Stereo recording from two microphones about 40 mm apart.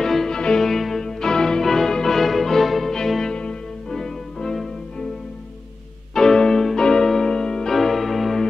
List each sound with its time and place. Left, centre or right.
0.0 s music: centre
0.7 s music: centre
3.3 s music: left
3.9 s music: centre
6.1 s music: centre